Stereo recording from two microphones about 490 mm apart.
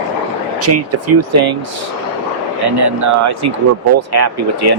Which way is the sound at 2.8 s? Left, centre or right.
Right.